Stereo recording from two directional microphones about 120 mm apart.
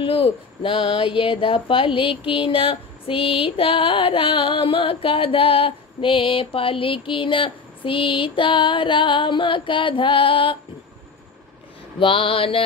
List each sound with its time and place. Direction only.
0.0 s speech: 45° left (ahead or behind)
12.0 s speech: 50° left (ahead or behind)